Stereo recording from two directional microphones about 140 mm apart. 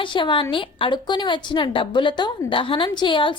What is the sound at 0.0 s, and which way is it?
A woman's voice, 35° left (ahead or behind).